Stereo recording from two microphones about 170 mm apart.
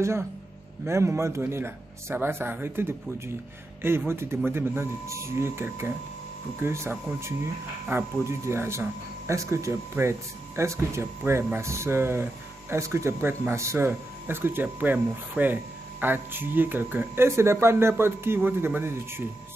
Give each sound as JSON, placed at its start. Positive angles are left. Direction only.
{"t": 0.8, "sound": "speech", "side_deg": -15}
{"t": 4.1, "sound": "speech", "side_deg": -15}